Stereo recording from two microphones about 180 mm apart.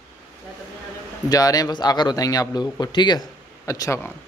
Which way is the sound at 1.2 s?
20° left (ahead or behind).